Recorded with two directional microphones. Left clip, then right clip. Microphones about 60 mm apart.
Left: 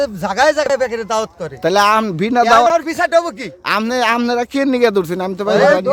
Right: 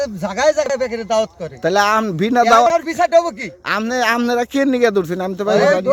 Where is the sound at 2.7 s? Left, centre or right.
Left.